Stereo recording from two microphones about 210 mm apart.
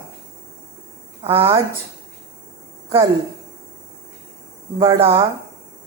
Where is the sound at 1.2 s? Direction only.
25° right (ahead or behind).